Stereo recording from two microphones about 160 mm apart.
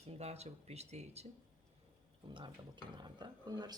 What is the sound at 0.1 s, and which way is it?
Speech, 40° right (ahead or behind).